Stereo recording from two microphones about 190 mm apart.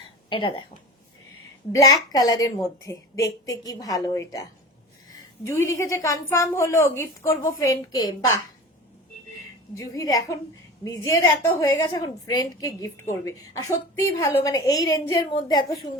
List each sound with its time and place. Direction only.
0.3 s a woman's voice: 25° left (ahead or behind)
1.7 s a woman's voice: 20° left (ahead or behind)
9.7 s a woman's voice: 20° left (ahead or behind)